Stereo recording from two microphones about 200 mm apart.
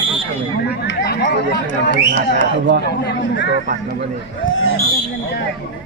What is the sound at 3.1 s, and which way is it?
Speech, 60° left (ahead or behind).